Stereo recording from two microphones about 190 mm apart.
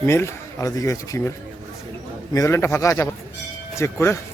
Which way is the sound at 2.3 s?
15° left (ahead or behind).